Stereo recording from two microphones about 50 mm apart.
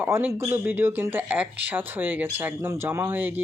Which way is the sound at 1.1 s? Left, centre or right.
Right.